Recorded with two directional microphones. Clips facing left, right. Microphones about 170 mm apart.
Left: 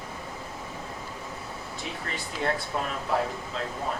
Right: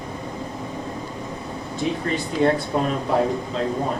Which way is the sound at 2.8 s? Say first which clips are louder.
Right 7 dB; 30° right (ahead or behind).